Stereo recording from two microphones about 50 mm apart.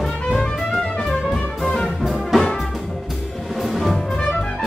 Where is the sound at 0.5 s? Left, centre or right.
Centre.